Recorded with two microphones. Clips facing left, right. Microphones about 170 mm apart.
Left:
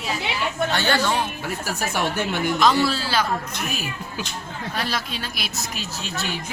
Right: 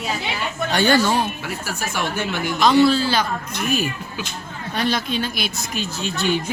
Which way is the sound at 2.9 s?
5° left (ahead or behind).